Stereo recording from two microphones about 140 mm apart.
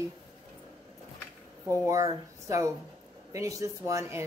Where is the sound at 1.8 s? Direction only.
25° right (ahead or behind).